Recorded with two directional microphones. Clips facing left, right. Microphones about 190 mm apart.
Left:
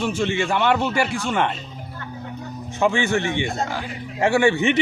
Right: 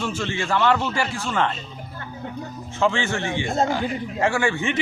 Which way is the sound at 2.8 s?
15° left (ahead or behind).